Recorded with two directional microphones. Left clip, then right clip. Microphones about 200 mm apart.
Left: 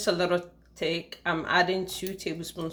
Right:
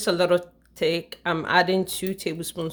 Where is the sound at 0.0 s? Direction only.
50° right (ahead or behind).